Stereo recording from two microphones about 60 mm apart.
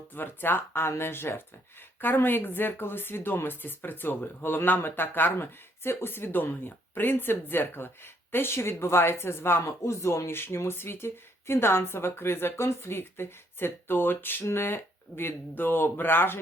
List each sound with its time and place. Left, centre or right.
0.1 s speech: left
9.6 s speech: left